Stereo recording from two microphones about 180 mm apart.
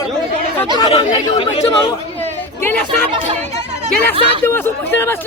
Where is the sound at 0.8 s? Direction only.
30° left (ahead or behind).